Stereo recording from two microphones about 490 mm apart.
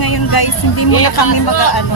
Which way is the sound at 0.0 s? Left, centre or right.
Left.